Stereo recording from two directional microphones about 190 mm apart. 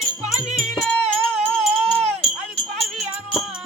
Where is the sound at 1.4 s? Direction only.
5° left (ahead or behind).